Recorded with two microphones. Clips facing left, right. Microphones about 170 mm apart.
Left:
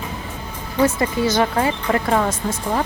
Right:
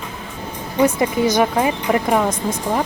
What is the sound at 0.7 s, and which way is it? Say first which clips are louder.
Speech: right 2 dB; 15° right (ahead or behind).